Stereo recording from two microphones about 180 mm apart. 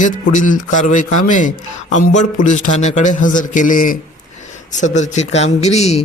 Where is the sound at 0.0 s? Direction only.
45° left (ahead or behind).